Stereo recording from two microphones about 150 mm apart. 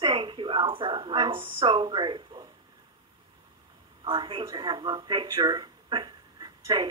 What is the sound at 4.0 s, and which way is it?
A woman's voice, 30° right (ahead or behind).